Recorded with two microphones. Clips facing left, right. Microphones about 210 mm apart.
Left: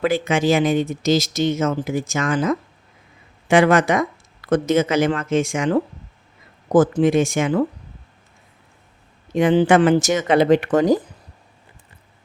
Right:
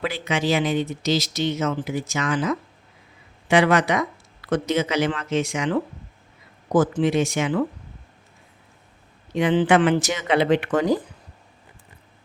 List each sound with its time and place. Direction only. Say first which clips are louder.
0.0 s speech: left 6 dB; 50° left (ahead or behind)
9.3 s speech: left 3 dB; 45° left (ahead or behind)